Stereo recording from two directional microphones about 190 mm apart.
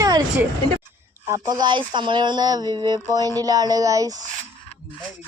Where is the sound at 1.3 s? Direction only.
20° right (ahead or behind).